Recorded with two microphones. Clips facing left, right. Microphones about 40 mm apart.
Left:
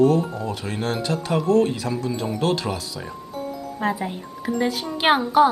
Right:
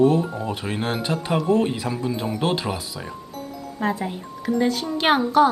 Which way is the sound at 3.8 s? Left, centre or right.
Centre.